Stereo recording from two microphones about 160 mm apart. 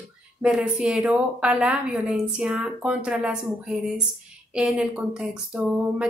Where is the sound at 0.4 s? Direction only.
5° right (ahead or behind).